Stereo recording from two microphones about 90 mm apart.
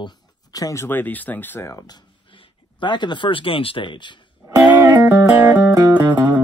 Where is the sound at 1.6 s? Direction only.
35° left (ahead or behind).